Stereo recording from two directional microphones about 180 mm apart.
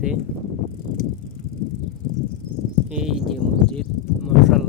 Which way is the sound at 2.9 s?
5° right (ahead or behind).